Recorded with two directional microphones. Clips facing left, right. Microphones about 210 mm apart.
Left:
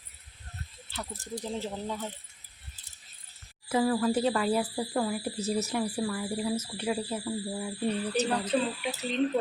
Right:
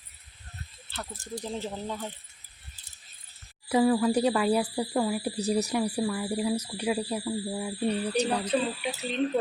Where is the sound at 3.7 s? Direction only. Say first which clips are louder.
Right 3 dB; 15° right (ahead or behind).